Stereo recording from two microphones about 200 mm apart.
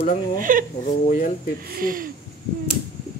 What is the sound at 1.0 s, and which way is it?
Speech, 40° left (ahead or behind).